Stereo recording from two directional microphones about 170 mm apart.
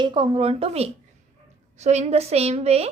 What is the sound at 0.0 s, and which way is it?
A woman's voice, 30° right (ahead or behind).